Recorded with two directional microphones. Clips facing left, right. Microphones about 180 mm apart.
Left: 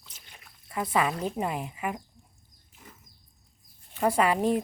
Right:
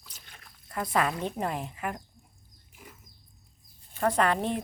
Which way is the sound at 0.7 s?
5° left (ahead or behind).